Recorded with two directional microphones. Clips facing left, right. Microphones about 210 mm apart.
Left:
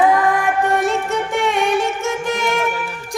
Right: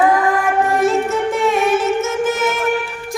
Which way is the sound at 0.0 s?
Centre (ahead or behind).